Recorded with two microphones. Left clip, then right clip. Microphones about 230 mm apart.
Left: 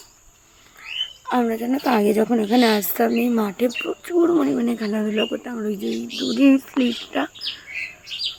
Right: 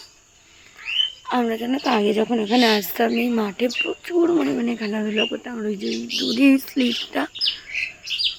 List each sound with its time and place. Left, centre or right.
1.3 s a woman's voice: centre